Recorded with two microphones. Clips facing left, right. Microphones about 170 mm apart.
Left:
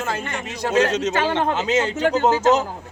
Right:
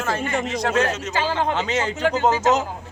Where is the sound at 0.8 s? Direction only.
80° left.